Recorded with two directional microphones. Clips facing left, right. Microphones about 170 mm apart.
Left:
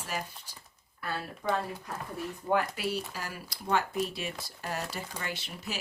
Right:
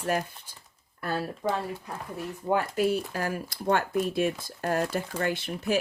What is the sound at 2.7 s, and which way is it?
Speech, 50° right (ahead or behind).